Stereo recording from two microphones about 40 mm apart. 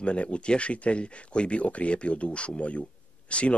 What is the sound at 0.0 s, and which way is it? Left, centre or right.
Speech, left.